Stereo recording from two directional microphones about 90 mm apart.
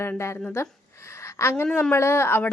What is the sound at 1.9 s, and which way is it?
Speech, 30° left (ahead or behind).